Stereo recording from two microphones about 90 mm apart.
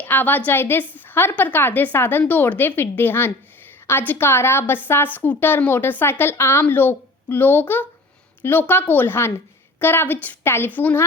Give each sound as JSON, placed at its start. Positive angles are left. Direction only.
{"t": 0.0, "sound": "a woman's voice", "side_deg": 20}